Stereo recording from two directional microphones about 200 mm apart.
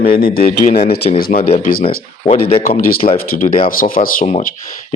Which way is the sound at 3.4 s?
45° left (ahead or behind).